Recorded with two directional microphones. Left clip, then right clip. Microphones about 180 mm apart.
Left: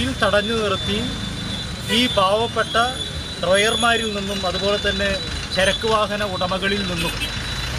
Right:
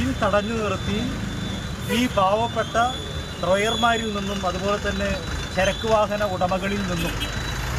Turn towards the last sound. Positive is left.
turn(degrees=5)  # may be behind; listen again after turning